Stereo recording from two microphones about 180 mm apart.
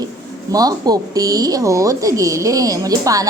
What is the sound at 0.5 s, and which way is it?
Speech, 20° right (ahead or behind).